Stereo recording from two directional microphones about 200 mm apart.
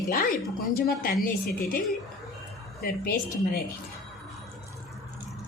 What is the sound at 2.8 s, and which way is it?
Speech, 50° left (ahead or behind).